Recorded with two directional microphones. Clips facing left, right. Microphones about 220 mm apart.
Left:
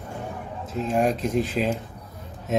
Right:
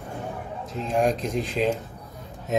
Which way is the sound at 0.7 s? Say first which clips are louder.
Left 1 dB; centre (ahead or behind).